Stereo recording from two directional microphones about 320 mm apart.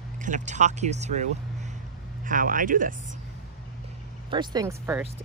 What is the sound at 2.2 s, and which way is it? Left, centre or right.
Speech, right.